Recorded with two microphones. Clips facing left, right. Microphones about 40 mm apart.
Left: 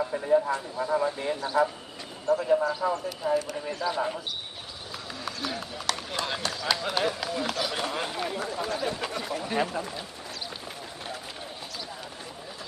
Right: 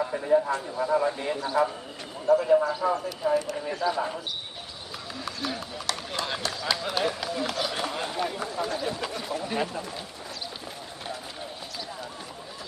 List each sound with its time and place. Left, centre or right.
0.1 s speech: centre
5.2 s run: centre
6.1 s speech: centre
8.7 s speech: left
9.4 s speech: centre